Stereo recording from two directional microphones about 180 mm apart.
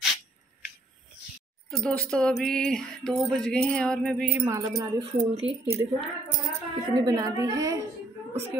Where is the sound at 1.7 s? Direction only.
5° left (ahead or behind).